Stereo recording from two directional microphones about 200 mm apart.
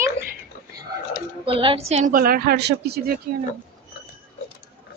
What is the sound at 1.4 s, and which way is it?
A woman's voice, 25° right (ahead or behind).